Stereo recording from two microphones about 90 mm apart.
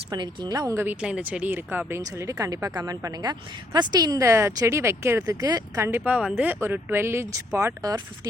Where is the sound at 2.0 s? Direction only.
40° right (ahead or behind).